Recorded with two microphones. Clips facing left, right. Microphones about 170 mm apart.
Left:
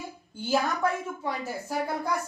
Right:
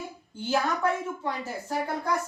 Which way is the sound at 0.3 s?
10° left (ahead or behind).